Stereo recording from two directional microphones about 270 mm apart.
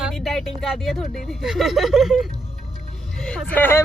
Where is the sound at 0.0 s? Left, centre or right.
Centre.